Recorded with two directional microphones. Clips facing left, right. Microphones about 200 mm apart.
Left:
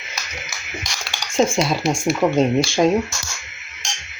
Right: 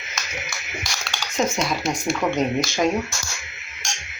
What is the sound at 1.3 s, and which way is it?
Speech, 30° left (ahead or behind).